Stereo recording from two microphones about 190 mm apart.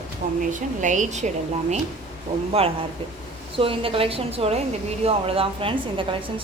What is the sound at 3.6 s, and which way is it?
A woman's voice, 30° right (ahead or behind).